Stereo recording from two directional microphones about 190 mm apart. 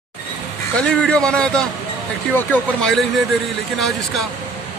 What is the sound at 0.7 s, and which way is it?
Speech, 5° left (ahead or behind).